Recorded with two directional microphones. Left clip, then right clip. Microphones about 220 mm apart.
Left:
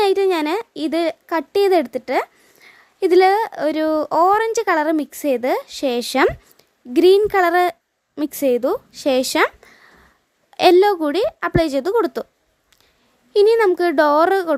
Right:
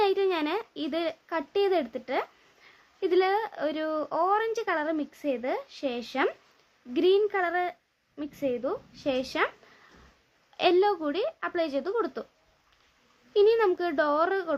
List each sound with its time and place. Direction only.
0.0 s a sound: 45° left (ahead or behind)
2.6 s a woman's voice: 45° left (ahead or behind)
10.6 s a woman's voice: 45° left (ahead or behind)
13.3 s a woman's voice: 45° left (ahead or behind)